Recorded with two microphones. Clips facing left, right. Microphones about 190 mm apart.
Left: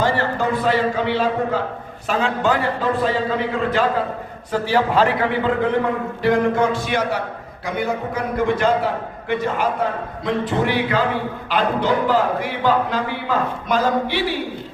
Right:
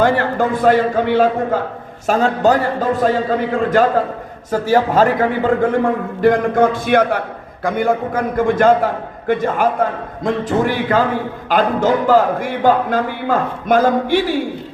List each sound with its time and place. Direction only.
0.0 s a man's voice: 55° right (ahead or behind)